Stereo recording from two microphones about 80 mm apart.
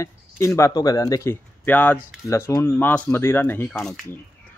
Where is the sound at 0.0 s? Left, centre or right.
Left.